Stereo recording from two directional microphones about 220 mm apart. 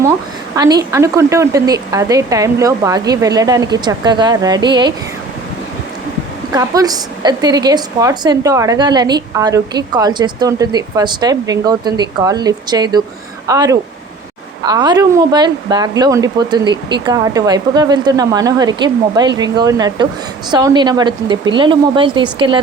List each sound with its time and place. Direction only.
0.5 s a woman's voice: 15° right (ahead or behind)
6.5 s a woman's voice: 15° right (ahead or behind)